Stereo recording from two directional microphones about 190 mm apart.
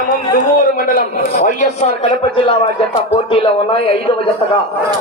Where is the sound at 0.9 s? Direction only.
45° left (ahead or behind).